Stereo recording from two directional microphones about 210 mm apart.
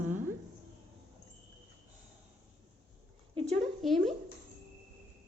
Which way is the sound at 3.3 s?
30° right (ahead or behind).